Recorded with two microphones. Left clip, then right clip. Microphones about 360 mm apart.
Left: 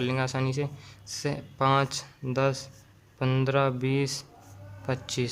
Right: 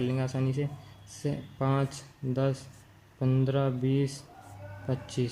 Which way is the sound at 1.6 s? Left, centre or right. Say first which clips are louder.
Left 8 dB; left.